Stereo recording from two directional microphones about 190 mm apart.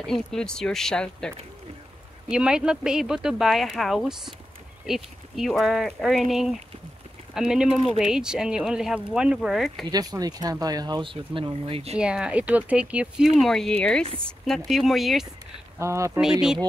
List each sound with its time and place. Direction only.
0.0 s speech: centre (ahead or behind)
7.3 s speech: 5° right (ahead or behind)
9.8 s speech: 20° right (ahead or behind)
12.0 s speech: 5° right (ahead or behind)
15.8 s speech: 15° right (ahead or behind)
16.2 s speech: 5° right (ahead or behind)